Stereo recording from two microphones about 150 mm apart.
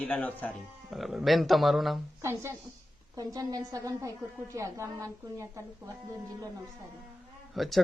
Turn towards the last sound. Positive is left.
turn(degrees=0)  # may be behind; listen again after turning